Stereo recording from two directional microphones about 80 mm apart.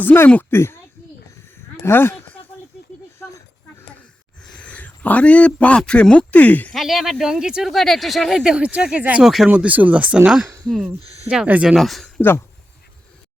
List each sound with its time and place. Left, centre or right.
0.0 s a child's voice: left
1.8 s speech: left
4.4 s speech: centre
6.7 s speech: centre
8.4 s speech: centre
9.2 s speech: centre
9.5 s speech: centre
11.8 s speech: centre